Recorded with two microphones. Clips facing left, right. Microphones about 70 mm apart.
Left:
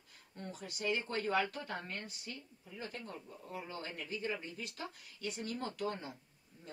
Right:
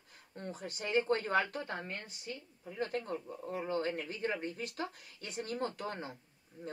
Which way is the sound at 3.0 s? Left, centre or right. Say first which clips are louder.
Right 8 dB; right.